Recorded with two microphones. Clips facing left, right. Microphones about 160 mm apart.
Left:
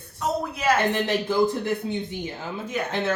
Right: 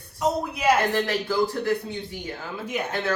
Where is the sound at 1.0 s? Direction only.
20° left (ahead or behind).